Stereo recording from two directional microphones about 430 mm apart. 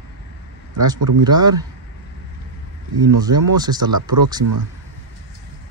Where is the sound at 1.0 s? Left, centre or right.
Right.